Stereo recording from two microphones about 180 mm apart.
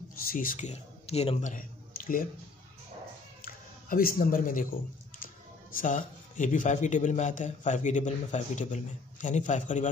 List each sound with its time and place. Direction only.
0.1 s a man's voice: 50° left (ahead or behind)
3.4 s speech: 50° left (ahead or behind)
5.8 s a man's voice: 45° left (ahead or behind)